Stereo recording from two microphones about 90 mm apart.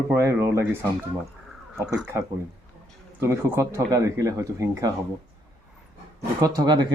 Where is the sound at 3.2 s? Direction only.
30° right (ahead or behind).